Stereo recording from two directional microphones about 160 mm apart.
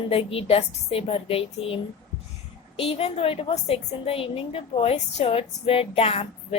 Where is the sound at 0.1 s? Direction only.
35° left (ahead or behind).